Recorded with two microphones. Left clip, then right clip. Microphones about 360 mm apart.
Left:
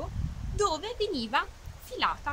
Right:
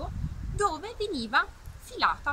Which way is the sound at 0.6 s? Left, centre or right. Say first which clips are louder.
Even; centre.